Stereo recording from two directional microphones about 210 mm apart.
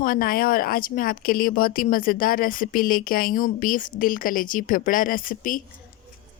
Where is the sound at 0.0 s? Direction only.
45° left (ahead or behind).